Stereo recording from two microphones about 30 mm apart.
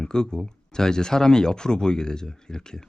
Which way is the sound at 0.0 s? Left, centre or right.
Left.